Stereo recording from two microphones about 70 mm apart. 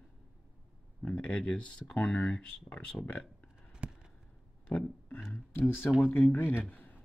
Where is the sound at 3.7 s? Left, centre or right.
Centre.